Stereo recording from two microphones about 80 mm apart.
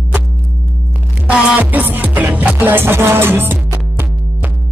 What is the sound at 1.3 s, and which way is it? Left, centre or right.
Music, centre.